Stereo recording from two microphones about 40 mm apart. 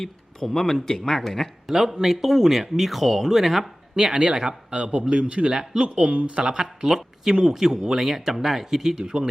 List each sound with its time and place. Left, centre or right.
0.0 s a man's voice: centre
1.7 s a man's voice: centre
3.9 s a man's voice: right
6.4 s speech: centre